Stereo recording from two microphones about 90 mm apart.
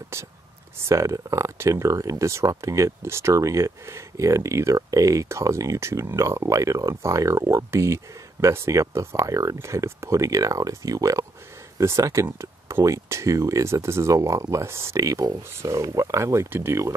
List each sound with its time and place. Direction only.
0.1 s speech: 30° right (ahead or behind)